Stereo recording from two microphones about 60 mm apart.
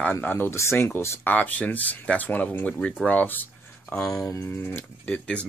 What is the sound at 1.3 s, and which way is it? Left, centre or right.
Speech, left.